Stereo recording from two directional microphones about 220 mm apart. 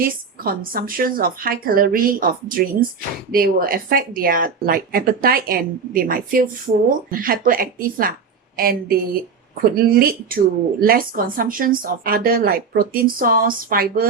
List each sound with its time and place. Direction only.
0.0 s speech: 40° right (ahead or behind)